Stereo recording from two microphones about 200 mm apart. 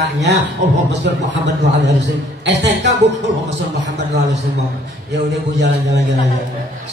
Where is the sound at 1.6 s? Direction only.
60° right (ahead or behind).